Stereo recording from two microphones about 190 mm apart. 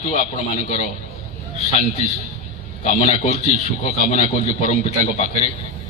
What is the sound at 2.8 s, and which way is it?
A man's voice, 35° left (ahead or behind).